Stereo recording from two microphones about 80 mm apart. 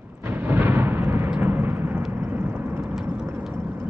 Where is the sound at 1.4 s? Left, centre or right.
Right.